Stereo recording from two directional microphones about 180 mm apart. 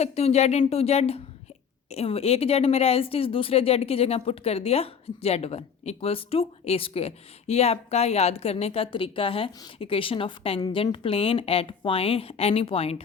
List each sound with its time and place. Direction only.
0.0 s speech: 35° left (ahead or behind)